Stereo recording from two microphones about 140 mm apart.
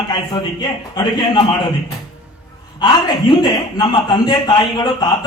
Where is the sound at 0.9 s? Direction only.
30° left (ahead or behind).